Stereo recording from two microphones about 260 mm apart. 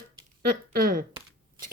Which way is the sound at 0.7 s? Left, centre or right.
Right.